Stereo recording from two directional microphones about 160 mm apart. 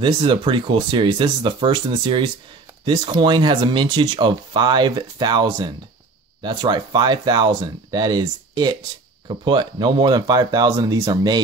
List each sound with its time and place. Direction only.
0.0 s speech: 30° right (ahead or behind)